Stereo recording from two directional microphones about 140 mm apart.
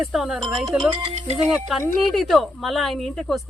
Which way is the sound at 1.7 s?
Centre (ahead or behind).